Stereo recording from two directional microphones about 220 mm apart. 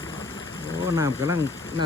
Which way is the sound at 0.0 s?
15° left (ahead or behind).